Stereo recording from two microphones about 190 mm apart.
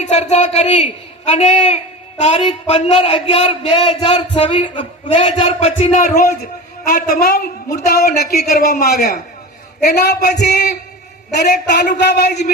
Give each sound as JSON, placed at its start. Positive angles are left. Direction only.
{"t": 0.0, "sound": "a man's voice", "side_deg": 35}
{"t": 6.9, "sound": "a woman's voice", "side_deg": 55}